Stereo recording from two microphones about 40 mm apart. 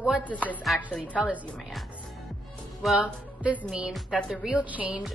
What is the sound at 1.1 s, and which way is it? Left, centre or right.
Speech, right.